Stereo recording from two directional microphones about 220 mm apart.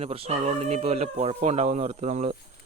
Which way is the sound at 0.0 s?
25° right (ahead or behind).